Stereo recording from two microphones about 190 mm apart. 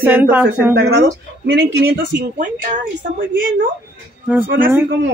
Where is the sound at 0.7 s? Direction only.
60° right (ahead or behind).